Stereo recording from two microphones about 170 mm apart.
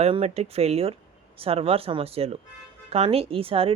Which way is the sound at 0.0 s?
35° right (ahead or behind).